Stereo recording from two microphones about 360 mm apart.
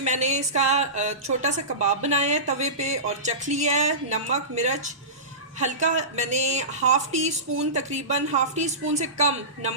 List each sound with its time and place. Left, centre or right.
0.0 s speech: centre